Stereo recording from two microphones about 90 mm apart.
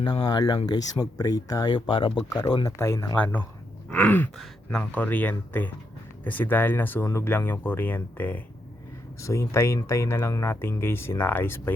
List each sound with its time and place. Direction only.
0.0 s speech: 50° left (ahead or behind)
1.7 s speech: 65° left (ahead or behind)
2.3 s speech: 45° left (ahead or behind)
2.6 s speech: 30° left (ahead or behind)
3.9 s gasp: 15° left (ahead or behind)
4.8 s speech: 20° left (ahead or behind)
7.0 s speech: 30° left (ahead or behind)
9.2 s speech: 30° left (ahead or behind)